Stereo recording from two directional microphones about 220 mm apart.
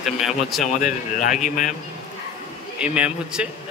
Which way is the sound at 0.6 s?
35° left (ahead or behind).